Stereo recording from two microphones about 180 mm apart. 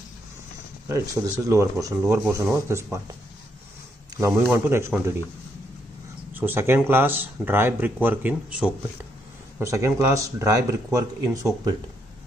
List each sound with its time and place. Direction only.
0.8 s speech: 15° right (ahead or behind)
4.6 s speech: 15° right (ahead or behind)
6.3 s speech: 10° right (ahead or behind)